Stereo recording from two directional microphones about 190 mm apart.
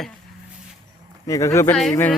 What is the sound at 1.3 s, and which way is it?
Speech, 15° left (ahead or behind).